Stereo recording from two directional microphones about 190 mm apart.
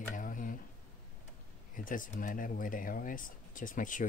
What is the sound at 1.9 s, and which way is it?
Speech, 45° left (ahead or behind).